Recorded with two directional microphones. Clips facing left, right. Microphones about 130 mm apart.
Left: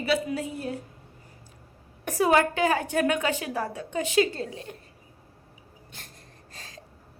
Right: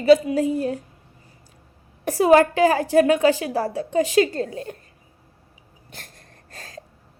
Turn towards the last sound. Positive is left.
turn(degrees=-50)  # may be behind; listen again after turning